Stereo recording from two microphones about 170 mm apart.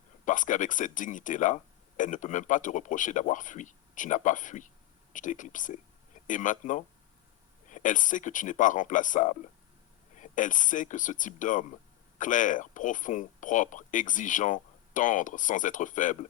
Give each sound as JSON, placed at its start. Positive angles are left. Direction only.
{"t": 0.3, "sound": "speech", "side_deg": 50}